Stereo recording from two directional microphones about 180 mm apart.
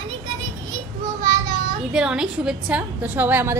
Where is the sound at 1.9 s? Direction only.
5° right (ahead or behind).